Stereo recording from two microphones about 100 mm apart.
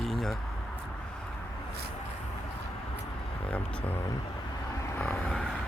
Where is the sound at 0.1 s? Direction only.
5° left (ahead or behind).